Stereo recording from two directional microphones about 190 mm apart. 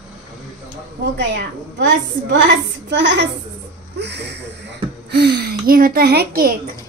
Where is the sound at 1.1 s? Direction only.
65° right (ahead or behind).